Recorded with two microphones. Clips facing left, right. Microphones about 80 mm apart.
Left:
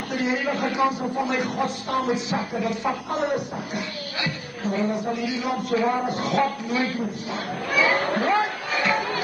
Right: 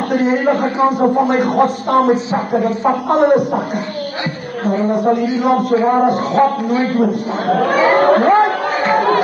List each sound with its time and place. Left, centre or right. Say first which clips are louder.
0.1 s speech: right 10 dB; right
3.1 s speech: right 13 dB; right
4.6 s a sound: right 8 dB; right
4.9 s speech: right 12 dB; right
6.9 s a man's voice: right 13 dB; right
7.7 s speech: right 7 dB; right
8.0 s speech: right 13 dB; right
8.7 s music: right 6 dB; right